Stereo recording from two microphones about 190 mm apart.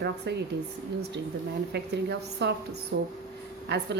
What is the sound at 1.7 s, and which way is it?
A woman's voice, 65° right (ahead or behind).